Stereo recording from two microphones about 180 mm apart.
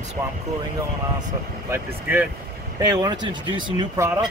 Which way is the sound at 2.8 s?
20° right (ahead or behind).